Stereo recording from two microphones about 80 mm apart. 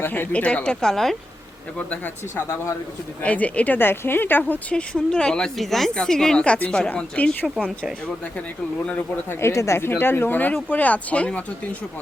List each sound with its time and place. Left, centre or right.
0.0 s speech: left; by 1.1 s centre
2.3 s speech: left
3.2 s speech: centre
4.7 s speech: centre
9.0 s speech: left; by 11.4 s centre